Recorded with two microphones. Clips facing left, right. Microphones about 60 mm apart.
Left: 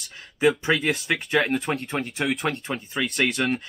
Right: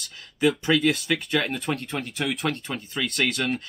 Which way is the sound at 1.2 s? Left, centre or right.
Centre.